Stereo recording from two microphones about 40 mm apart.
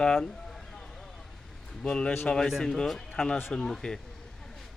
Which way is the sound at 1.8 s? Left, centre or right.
Left.